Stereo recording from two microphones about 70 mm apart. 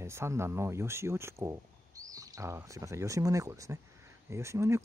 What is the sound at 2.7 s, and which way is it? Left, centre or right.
Speech, right.